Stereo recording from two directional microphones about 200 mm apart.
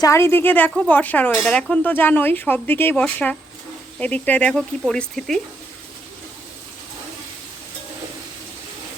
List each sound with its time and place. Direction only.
0.0 s speech: 15° left (ahead or behind)